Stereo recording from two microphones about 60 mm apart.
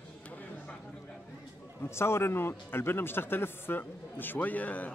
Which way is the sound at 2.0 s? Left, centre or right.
Left.